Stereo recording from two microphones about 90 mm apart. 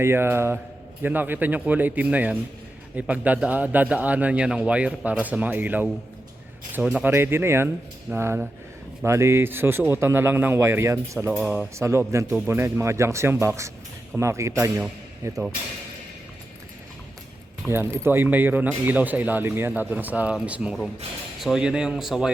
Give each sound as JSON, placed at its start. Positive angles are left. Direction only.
{"t": 0.0, "sound": "a man's voice", "side_deg": -25}
{"t": 7.0, "sound": "speech", "side_deg": -25}
{"t": 11.3, "sound": "a man's voice", "side_deg": -15}
{"t": 11.8, "sound": "speech", "side_deg": -30}
{"t": 17.7, "sound": "a man's voice", "side_deg": -30}